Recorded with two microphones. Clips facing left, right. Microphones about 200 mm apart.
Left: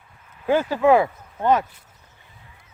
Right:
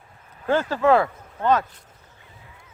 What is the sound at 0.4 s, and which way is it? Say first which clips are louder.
Speech: left 2 dB; 10° left (ahead or behind).